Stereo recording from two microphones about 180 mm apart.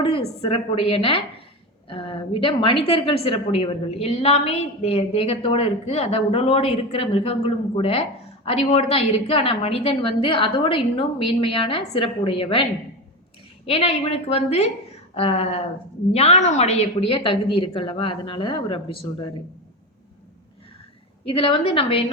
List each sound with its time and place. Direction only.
0.4 s a woman's voice: 30° left (ahead or behind)
13.7 s a woman's voice: 35° left (ahead or behind)
21.2 s a woman's voice: 30° left (ahead or behind)